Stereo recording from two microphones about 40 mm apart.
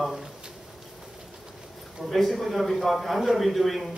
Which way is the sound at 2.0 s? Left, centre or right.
Centre.